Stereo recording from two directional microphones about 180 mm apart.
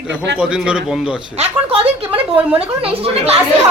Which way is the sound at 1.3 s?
35° right (ahead or behind).